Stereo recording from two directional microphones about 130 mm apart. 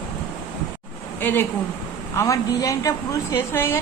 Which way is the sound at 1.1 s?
15° left (ahead or behind).